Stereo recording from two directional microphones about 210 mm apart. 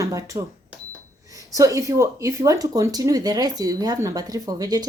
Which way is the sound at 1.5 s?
15° right (ahead or behind).